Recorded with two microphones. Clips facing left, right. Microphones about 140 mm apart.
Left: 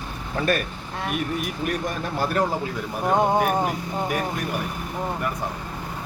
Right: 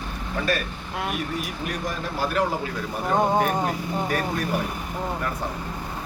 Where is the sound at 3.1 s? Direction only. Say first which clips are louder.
Left 1 dB; 10° left (ahead or behind).